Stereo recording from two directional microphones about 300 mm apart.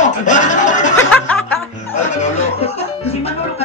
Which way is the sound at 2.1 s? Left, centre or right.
Left.